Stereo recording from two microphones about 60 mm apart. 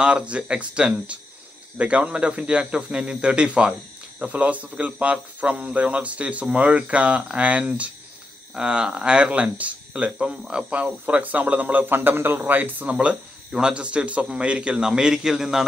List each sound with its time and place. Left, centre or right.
0.0 s a man's voice: centre
12.9 s a man's voice: right